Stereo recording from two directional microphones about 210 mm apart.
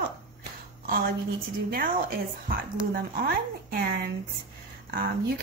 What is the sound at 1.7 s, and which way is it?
Speech, 45° right (ahead or behind).